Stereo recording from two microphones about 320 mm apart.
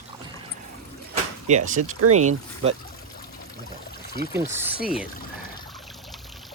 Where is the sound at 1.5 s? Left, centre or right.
Right.